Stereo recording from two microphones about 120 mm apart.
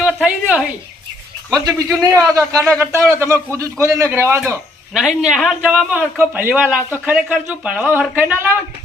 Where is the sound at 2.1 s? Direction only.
25° right (ahead or behind).